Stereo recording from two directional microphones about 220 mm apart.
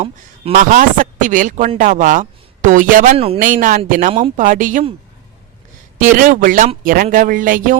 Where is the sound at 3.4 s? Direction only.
40° right (ahead or behind).